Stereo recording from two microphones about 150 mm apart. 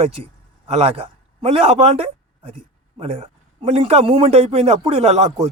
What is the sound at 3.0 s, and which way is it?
Speech, 40° right (ahead or behind).